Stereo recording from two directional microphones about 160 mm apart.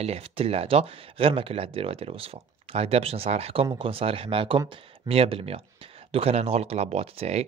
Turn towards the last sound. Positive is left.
turn(degrees=-40)  # may be behind; listen again after turning